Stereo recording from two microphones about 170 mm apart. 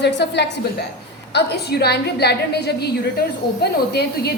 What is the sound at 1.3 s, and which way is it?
A woman's voice, 75° left (ahead or behind).